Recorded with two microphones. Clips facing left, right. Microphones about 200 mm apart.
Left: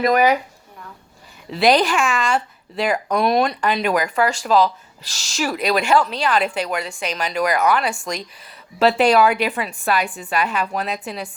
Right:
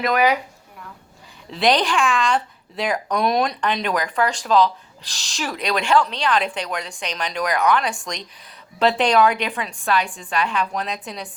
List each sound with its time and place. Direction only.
0.0 s speech: 40° left (ahead or behind)
1.5 s a woman's voice: 5° left (ahead or behind)